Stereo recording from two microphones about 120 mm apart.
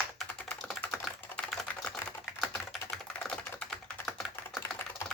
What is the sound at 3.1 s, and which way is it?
Typing, 5° left (ahead or behind).